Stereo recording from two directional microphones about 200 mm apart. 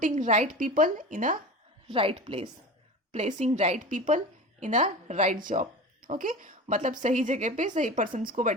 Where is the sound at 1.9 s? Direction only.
25° right (ahead or behind).